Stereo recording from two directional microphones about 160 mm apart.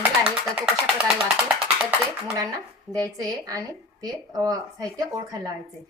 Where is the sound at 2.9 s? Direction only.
20° right (ahead or behind).